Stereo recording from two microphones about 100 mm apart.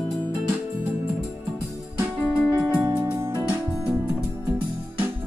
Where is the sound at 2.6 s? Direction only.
15° right (ahead or behind).